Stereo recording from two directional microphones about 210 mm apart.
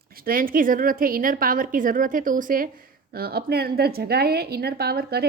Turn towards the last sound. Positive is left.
turn(degrees=-50)  # may be behind; listen again after turning